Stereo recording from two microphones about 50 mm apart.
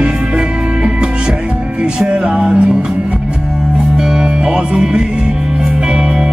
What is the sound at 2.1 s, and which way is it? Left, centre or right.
Music, centre.